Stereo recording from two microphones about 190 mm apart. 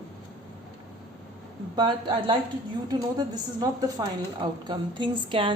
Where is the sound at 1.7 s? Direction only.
25° right (ahead or behind).